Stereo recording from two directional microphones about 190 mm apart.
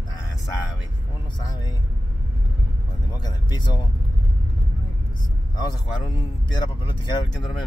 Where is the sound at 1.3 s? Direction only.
20° left (ahead or behind).